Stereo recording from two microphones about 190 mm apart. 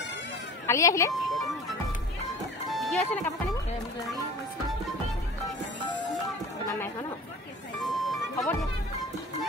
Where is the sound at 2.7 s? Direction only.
Centre (ahead or behind).